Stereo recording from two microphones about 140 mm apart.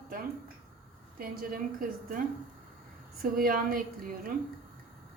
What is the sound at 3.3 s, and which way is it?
Speech, 90° right.